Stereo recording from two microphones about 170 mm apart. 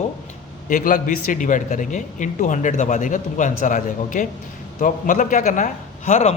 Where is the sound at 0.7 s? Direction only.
50° left (ahead or behind).